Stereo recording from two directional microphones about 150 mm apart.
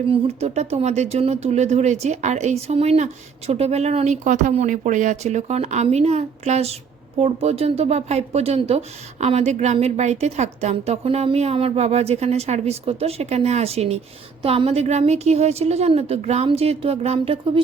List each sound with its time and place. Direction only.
0.1 s speech: 45° right (ahead or behind)